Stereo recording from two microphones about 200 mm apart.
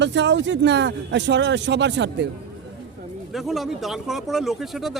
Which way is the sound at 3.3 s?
Centre (ahead or behind).